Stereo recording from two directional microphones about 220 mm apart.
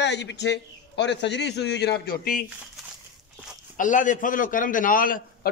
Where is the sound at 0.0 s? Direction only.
50° left (ahead or behind).